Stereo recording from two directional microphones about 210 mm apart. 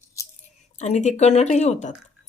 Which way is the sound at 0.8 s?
35° left (ahead or behind).